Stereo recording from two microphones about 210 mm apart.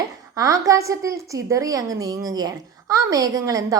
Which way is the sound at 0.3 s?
15° right (ahead or behind).